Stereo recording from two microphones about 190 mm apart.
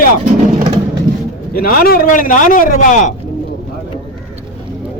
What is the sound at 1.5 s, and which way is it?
A man's voice, 50° left (ahead or behind).